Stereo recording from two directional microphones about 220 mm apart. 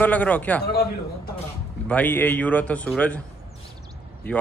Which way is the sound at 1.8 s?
5° left (ahead or behind).